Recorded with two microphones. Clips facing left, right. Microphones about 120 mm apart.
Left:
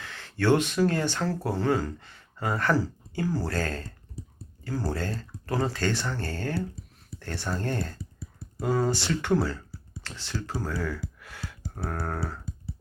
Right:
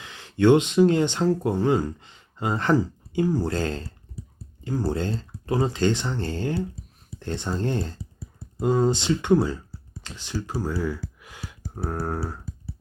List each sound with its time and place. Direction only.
0.0 s speech: 15° right (ahead or behind)
11.2 s a sound: 15° right (ahead or behind)
11.7 s speech: 10° right (ahead or behind)